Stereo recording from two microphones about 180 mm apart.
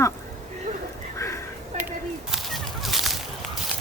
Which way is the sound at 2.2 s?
Centre (ahead or behind).